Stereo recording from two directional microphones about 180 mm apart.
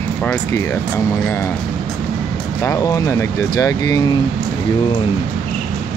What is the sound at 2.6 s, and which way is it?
Speech, 15° left (ahead or behind).